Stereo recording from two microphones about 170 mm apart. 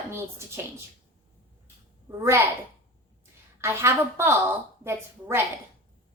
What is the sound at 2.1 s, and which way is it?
Speech, 15° right (ahead or behind).